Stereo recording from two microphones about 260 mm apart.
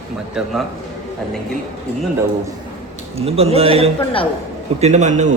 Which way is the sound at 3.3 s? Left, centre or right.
Right.